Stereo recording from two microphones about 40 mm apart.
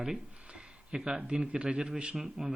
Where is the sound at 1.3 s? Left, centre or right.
Right.